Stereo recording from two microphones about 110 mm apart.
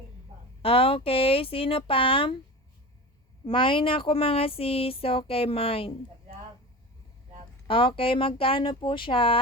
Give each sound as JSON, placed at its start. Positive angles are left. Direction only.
{"t": 0.6, "sound": "speech", "side_deg": 55}
{"t": 3.4, "sound": "speech", "side_deg": 50}
{"t": 7.7, "sound": "speech", "side_deg": 55}